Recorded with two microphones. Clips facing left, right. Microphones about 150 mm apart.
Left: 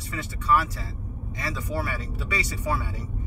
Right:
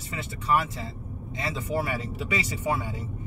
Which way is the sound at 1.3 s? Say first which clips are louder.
Right 2 dB; 25° right (ahead or behind).